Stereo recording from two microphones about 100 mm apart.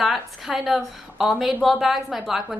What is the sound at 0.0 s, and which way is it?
A woman's voice, centre (ahead or behind).